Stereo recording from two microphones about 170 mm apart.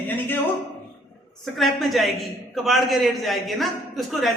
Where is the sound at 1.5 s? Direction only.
Centre (ahead or behind).